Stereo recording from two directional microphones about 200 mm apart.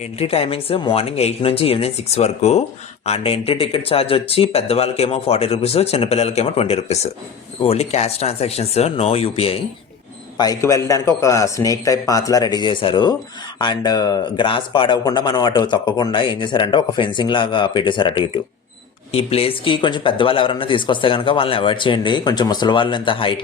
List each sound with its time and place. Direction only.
0.0 s speech: 30° left (ahead or behind)
10.3 s a man's voice: 20° left (ahead or behind)